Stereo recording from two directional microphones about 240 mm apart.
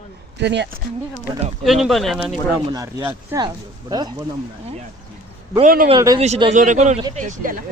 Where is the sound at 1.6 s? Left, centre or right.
Centre.